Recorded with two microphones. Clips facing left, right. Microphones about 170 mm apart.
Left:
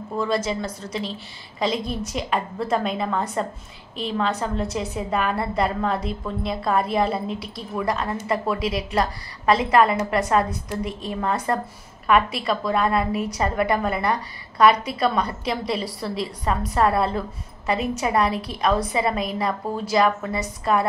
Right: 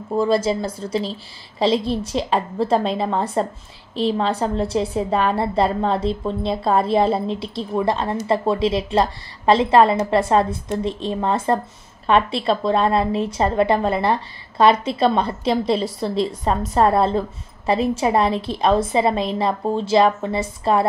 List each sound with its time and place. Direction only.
0.1 s a woman's voice: 30° right (ahead or behind)